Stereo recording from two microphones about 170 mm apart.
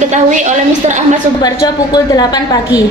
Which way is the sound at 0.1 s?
45° right (ahead or behind).